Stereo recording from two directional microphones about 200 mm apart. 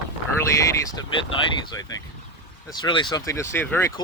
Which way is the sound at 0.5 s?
15° left (ahead or behind).